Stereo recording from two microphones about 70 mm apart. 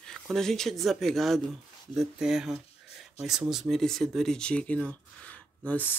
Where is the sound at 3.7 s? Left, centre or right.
Centre.